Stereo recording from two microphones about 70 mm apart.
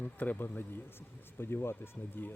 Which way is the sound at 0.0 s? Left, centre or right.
Left.